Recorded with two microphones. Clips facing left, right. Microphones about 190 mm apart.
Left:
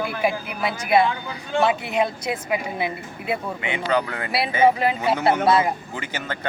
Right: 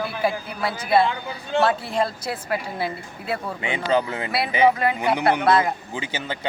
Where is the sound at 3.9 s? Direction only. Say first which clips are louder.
Right 2 dB; 20° right (ahead or behind).